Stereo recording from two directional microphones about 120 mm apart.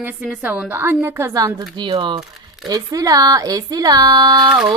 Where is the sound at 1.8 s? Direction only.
40° right (ahead or behind).